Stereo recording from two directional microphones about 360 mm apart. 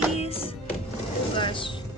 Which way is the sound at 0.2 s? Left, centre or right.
Centre.